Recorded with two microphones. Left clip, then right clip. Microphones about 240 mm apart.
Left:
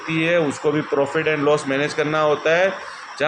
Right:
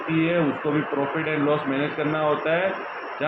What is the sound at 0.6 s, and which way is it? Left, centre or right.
A man's voice, centre.